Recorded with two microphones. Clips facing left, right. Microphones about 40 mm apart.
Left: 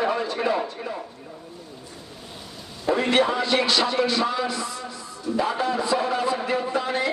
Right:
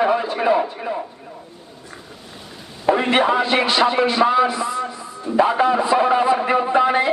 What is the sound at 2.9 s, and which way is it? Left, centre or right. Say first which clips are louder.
A man's voice: right 4 dB; right.